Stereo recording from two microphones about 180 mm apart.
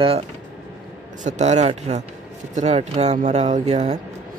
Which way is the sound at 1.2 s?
40° right (ahead or behind).